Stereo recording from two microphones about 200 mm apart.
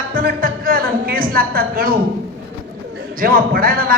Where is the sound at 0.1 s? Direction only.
45° right (ahead or behind).